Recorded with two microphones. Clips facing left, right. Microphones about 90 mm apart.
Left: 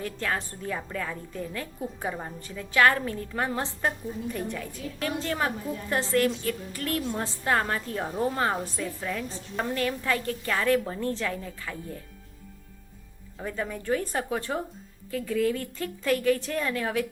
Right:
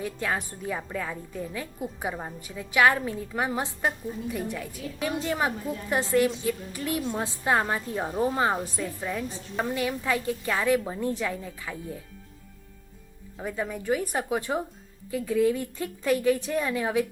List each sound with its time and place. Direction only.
0.0 s a woman's voice: 10° right (ahead or behind)
13.4 s a woman's voice: 10° right (ahead or behind)